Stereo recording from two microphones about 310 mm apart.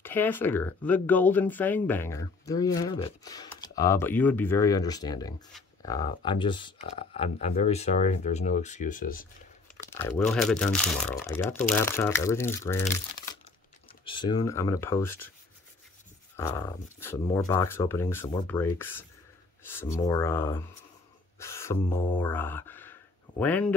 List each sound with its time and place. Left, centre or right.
0.0 s speech: centre; by 9.3 s left
9.8 s speech: centre
16.3 s speech: centre
20.1 s speech: centre
21.4 s a sound: centre
23.4 s speech: centre